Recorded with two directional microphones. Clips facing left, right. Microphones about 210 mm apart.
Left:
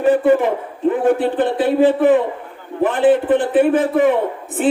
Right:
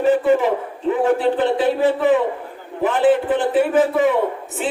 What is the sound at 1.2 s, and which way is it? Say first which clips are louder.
Speech: even; 55° left (ahead or behind).